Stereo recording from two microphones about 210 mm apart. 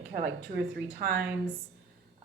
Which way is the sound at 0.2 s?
55° right (ahead or behind).